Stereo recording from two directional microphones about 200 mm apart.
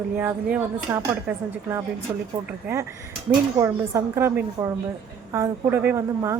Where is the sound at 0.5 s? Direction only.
10° right (ahead or behind).